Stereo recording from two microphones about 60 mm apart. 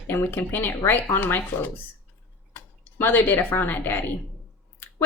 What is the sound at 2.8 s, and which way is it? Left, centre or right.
A woman's voice, left.